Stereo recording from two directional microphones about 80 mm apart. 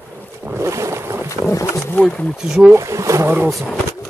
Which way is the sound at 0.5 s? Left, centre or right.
Right.